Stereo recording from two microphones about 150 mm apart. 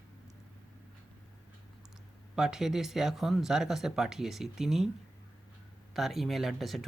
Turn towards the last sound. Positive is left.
turn(degrees=0)  # may be behind; listen again after turning